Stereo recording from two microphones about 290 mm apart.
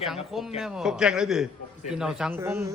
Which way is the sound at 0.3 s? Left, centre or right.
Centre.